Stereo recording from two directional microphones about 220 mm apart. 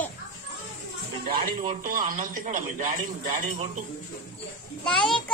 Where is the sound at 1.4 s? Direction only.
40° right (ahead or behind).